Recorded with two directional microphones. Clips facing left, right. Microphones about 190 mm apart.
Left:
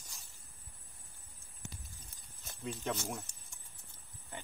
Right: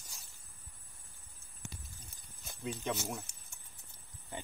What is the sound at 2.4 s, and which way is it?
Speech, centre (ahead or behind).